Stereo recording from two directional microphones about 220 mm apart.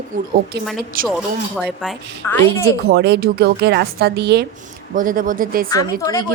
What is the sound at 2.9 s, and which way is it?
A woman's voice, 50° right (ahead or behind).